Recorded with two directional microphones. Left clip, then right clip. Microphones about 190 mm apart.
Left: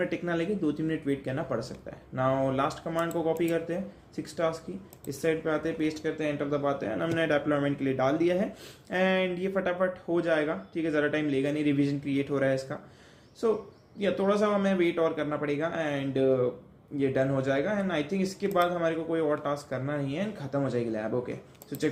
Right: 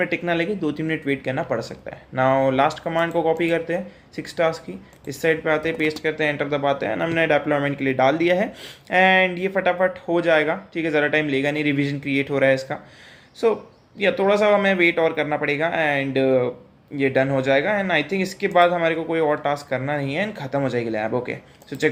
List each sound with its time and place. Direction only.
0.1 s speech: 15° right (ahead or behind)
14.0 s speech: 15° right (ahead or behind)